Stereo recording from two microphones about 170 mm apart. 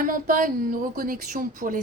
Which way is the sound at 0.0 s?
55° right (ahead or behind).